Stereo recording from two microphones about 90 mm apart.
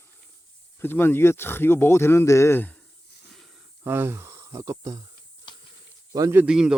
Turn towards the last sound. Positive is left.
turn(degrees=-10)  # may be behind; listen again after turning